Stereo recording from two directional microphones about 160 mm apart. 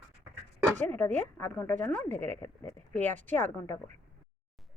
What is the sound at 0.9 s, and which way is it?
Speech, 10° left (ahead or behind).